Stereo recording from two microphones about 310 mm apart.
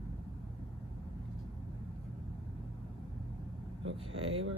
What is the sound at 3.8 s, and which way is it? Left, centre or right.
Vehicle, right.